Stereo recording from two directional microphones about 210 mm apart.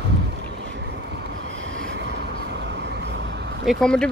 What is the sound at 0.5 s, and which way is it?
Vehicle, 55° right (ahead or behind).